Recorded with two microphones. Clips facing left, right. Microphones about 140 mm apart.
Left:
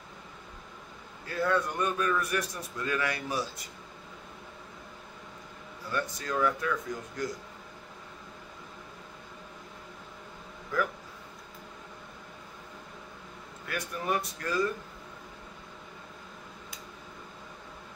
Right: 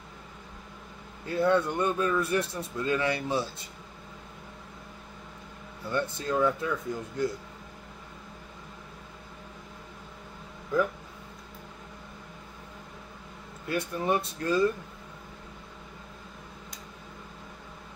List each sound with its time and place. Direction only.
1.2 s a man's voice: 25° right (ahead or behind)
5.9 s a man's voice: 25° right (ahead or behind)
10.7 s a man's voice: 20° right (ahead or behind)
13.7 s a man's voice: 25° right (ahead or behind)